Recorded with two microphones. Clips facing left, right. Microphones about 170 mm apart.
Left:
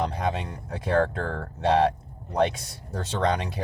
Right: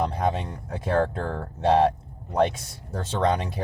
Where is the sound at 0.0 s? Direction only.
50° right (ahead or behind).